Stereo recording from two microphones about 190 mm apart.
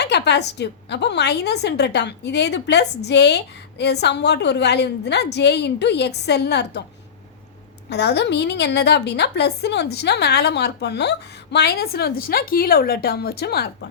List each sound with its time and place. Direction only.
0.0 s a woman's voice: 60° left (ahead or behind)
7.9 s a woman's voice: 60° left (ahead or behind)